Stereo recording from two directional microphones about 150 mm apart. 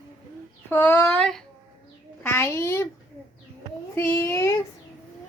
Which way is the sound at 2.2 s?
15° left (ahead or behind).